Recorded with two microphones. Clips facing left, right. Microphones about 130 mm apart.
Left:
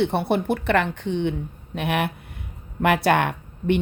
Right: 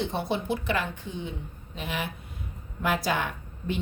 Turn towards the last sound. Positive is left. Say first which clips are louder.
# left 10 dB
turn(degrees=65)  # may be behind; listen again after turning